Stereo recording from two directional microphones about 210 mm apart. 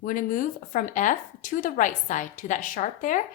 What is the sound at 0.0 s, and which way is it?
Speech, 40° left (ahead or behind).